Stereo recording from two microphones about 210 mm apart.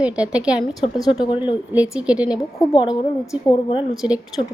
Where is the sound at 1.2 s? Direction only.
20° left (ahead or behind).